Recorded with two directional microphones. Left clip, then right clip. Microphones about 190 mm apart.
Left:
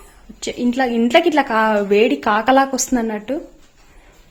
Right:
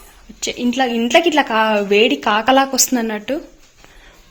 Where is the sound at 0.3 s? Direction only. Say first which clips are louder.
Right 1 dB; 20° left (ahead or behind).